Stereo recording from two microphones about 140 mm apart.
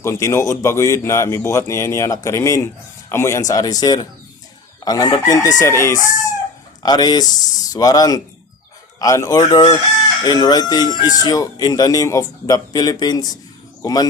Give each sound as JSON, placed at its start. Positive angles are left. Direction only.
{"t": 0.0, "sound": "speech", "side_deg": 20}
{"t": 6.8, "sound": "speech", "side_deg": 30}